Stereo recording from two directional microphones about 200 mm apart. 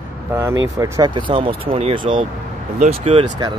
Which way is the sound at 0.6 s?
15° right (ahead or behind).